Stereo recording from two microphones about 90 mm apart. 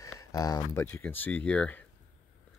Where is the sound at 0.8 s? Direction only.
20° left (ahead or behind).